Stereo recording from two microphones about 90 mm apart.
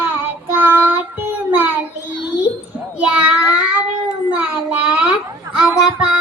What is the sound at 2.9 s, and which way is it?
Child singing, 15° right (ahead or behind).